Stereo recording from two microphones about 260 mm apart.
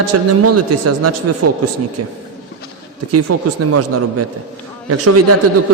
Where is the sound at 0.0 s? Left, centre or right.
Right.